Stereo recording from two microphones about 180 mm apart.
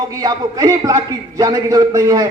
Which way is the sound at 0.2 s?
20° right (ahead or behind).